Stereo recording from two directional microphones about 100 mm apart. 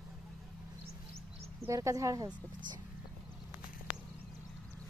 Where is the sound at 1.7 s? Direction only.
35° right (ahead or behind).